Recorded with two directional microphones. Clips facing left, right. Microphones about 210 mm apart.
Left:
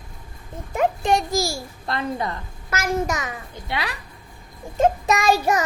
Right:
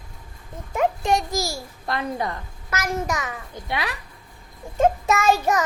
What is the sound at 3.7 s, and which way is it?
Speech, 20° right (ahead or behind).